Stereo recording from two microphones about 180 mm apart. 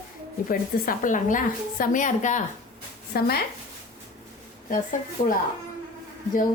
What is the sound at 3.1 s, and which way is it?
Speech, 55° left (ahead or behind).